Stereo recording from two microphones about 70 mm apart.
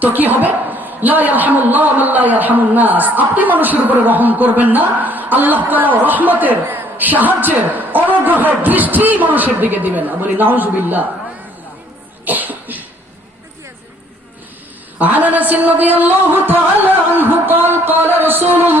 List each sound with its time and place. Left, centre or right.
0.0 s a woman's voice: right
12.2 s cough: right
14.9 s a woman's voice: right